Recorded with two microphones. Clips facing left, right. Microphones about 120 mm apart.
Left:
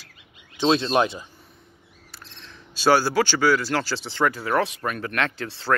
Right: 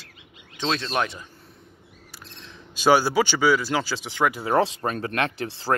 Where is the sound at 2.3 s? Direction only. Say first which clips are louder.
Right 1 dB; 10° right (ahead or behind).